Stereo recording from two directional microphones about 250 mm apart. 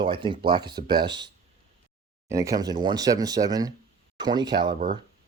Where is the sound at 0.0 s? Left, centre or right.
Centre.